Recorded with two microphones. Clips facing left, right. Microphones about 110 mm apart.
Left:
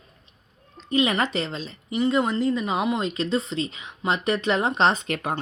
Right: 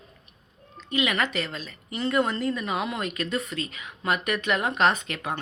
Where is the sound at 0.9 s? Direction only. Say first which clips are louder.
Left 4 dB; 35° left (ahead or behind).